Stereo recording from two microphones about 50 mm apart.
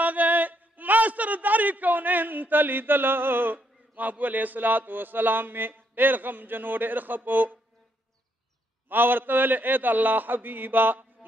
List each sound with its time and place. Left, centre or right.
0.0 s a man's voice: right
8.8 s a man's voice: right